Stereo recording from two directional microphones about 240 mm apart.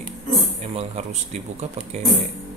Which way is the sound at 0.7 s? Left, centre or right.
Right.